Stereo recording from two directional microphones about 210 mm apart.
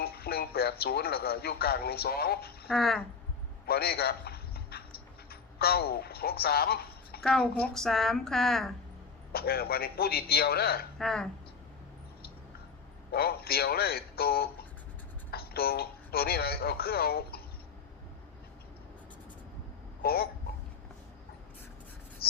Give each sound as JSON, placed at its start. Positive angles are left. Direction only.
{"t": 0.0, "sound": "speech", "side_deg": 45}
{"t": 2.6, "sound": "a woman's voice", "side_deg": 0}
{"t": 3.7, "sound": "a sound", "side_deg": 45}
{"t": 5.3, "sound": "speech", "side_deg": 45}
{"t": 7.2, "sound": "a woman's voice", "side_deg": 5}
{"t": 9.3, "sound": "speech", "side_deg": 45}
{"t": 10.9, "sound": "speech", "side_deg": 0}
{"t": 13.1, "sound": "a man's voice", "side_deg": 45}
{"t": 20.0, "sound": "speech", "side_deg": 45}
{"t": 22.2, "sound": "a sound", "side_deg": 45}